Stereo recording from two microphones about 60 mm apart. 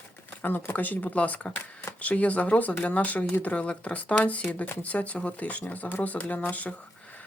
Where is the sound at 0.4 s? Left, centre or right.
Left.